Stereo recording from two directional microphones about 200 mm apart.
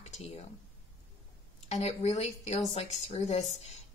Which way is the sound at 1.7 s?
35° left (ahead or behind).